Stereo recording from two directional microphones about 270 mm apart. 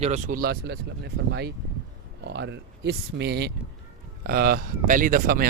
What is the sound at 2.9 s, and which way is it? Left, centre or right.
Speech, right.